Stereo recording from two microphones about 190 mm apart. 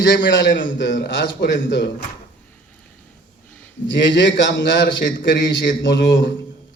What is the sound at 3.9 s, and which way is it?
A man's voice, 70° left (ahead or behind).